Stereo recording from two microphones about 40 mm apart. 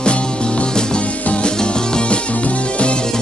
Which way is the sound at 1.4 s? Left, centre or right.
Left.